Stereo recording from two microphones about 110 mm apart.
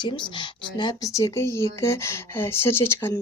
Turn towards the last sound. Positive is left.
turn(degrees=20)  # may be behind; listen again after turning